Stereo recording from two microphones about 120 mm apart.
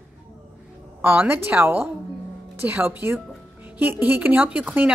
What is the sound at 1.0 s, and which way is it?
Speech, 15° right (ahead or behind).